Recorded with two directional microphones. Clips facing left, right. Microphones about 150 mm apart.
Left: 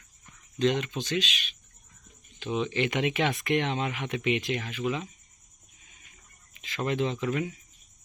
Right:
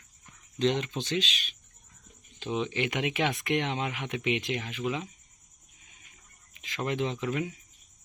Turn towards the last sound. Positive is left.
turn(degrees=-15)  # may be behind; listen again after turning